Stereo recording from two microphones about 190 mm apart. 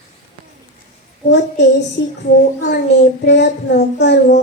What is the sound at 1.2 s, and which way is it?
Speech, 65° left (ahead or behind).